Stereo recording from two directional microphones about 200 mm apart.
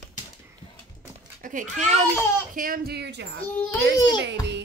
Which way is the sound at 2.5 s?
45° right (ahead or behind).